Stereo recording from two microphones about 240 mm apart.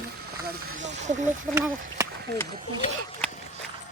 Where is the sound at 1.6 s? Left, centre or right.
Centre.